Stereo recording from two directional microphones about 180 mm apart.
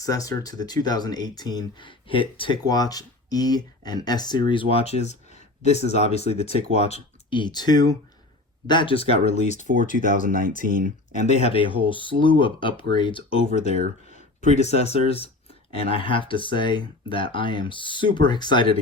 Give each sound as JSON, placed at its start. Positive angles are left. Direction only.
{"t": 0.0, "sound": "speech", "side_deg": 20}
{"t": 9.9, "sound": "speech", "side_deg": -50}
{"t": 11.3, "sound": "speech", "side_deg": 35}
{"t": 14.1, "sound": "speech", "side_deg": 40}